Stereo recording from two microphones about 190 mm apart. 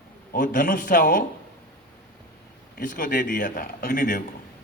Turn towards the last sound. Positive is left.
turn(degrees=45)  # may be behind; listen again after turning